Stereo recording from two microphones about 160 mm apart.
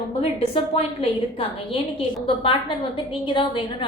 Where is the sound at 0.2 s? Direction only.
40° left (ahead or behind).